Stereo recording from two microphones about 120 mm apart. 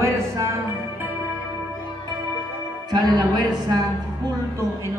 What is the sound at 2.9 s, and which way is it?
Speech, 35° right (ahead or behind).